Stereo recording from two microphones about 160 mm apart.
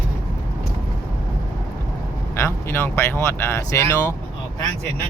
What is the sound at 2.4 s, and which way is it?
Speech, 15° left (ahead or behind).